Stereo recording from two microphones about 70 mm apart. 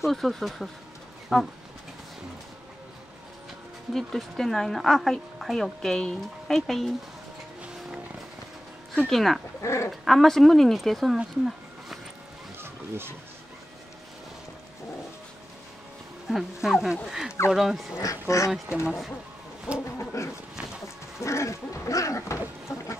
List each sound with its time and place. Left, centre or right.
0.0 s speech: centre
3.9 s speech: centre
9.0 s speech: centre
9.6 s bird: left
10.0 s speech: centre
11.1 s a sound: centre
12.5 s a sound: right
16.3 s speech: centre
17.9 s speech: left
18.7 s speech: right
21.2 s a sound: left